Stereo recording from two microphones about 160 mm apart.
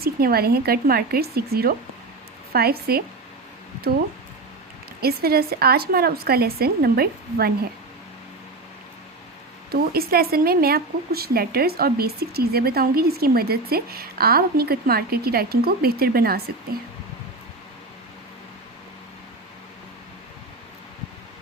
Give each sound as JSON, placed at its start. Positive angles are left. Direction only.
{"t": 0.0, "sound": "speech", "side_deg": -70}
{"t": 4.9, "sound": "speech", "side_deg": -75}
{"t": 9.9, "sound": "speech", "side_deg": -70}